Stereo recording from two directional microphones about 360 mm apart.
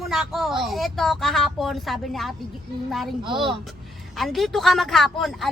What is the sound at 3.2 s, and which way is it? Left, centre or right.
Speech, centre.